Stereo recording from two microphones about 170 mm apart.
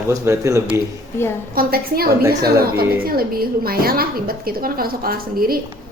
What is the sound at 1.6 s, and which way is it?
A woman's voice, 65° right (ahead or behind).